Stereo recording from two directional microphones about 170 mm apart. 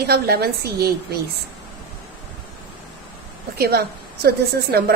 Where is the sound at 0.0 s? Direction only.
65° right (ahead or behind).